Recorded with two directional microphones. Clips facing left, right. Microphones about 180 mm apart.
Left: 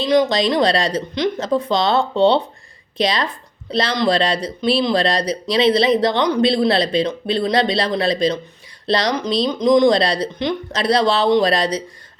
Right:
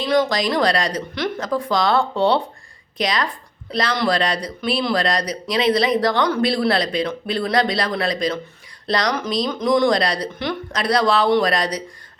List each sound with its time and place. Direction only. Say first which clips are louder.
0.0 s speech: left 3 dB; 20° left (ahead or behind)